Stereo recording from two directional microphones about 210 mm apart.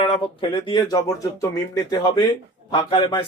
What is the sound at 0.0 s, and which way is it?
Speech, 25° left (ahead or behind).